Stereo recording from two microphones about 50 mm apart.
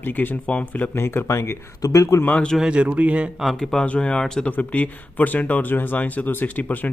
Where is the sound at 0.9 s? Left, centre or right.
Left.